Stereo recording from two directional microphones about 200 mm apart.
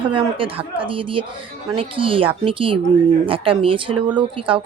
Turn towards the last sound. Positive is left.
turn(degrees=-25)  # may be behind; listen again after turning